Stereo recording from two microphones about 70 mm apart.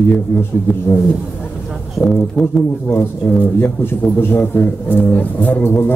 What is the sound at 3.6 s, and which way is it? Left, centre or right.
A man's voice, left.